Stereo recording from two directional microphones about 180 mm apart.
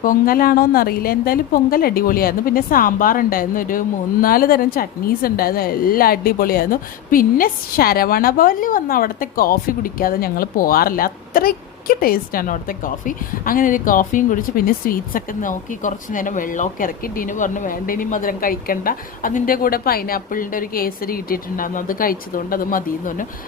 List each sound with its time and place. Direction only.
0.0 s a woman's voice: 50° left (ahead or behind)